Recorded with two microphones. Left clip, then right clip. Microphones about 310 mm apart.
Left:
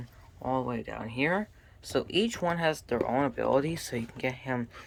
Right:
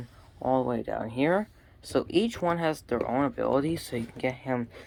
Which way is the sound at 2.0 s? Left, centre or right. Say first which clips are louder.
Right 2 dB; centre.